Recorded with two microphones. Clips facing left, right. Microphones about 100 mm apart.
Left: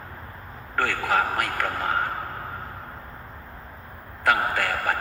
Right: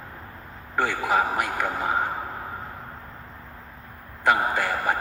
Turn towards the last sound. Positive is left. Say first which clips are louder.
# right 1 dB
turn(degrees=-15)  # may be behind; listen again after turning